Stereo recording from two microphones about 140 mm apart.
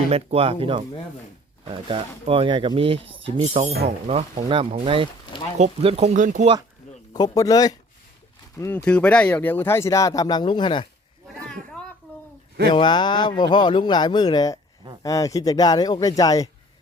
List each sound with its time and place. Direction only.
0.1 s speech: 45° right (ahead or behind)
4.4 s speech: 40° right (ahead or behind)
6.1 s speech: 60° right (ahead or behind)
7.1 s speech: 25° left (ahead or behind)
8.8 s speech: 10° left (ahead or behind); by 10.8 s 35° left (ahead or behind)
11.4 s a sound: 5° left (ahead or behind)
12.7 s speech: 35° left (ahead or behind)